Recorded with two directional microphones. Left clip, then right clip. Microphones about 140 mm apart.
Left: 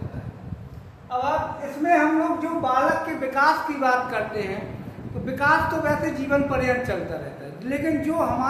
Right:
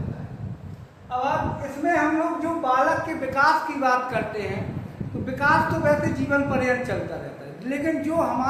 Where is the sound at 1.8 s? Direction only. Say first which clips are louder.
Left 3 dB; 20° left (ahead or behind).